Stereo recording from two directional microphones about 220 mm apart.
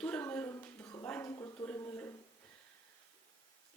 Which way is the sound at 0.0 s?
5° left (ahead or behind).